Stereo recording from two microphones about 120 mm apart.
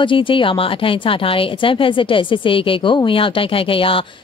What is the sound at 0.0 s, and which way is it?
Speech, 45° left (ahead or behind).